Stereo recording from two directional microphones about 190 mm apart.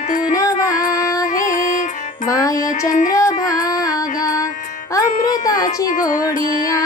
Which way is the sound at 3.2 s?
15° left (ahead or behind).